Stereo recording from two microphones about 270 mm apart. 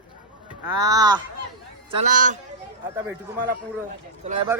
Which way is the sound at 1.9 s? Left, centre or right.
Right.